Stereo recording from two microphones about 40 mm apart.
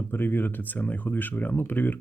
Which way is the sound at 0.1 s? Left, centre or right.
Left.